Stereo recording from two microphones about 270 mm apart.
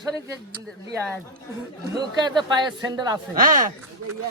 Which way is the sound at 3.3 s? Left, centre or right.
Right.